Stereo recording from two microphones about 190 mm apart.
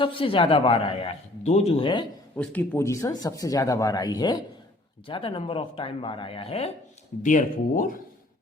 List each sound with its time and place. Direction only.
0.0 s a man's voice: 25° left (ahead or behind)
2.3 s a man's voice: 10° left (ahead or behind); by 6.7 s 30° left (ahead or behind)
7.2 s speech: 40° left (ahead or behind)